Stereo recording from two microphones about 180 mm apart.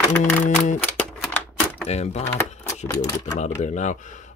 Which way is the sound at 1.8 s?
35° left (ahead or behind).